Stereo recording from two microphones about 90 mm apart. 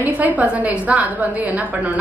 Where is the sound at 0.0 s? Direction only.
15° right (ahead or behind).